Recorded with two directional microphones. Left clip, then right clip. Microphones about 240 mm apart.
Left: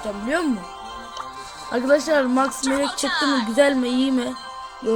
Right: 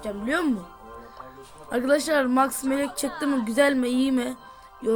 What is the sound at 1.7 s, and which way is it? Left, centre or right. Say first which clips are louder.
Speech: left 4 dB; centre.